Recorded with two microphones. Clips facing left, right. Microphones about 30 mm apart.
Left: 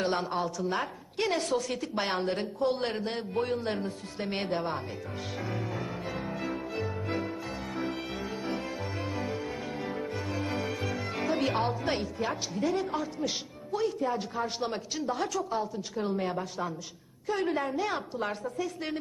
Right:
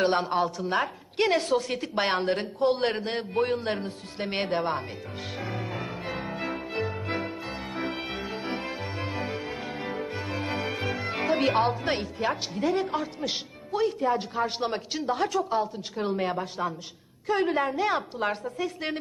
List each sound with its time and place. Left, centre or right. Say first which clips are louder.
0.0 s a woman's voice: right 5 dB; right
0.6 s a woman's voice: right 4 dB; right
5.4 s music: right 2 dB; right
11.6 s a woman's voice: right 3 dB; right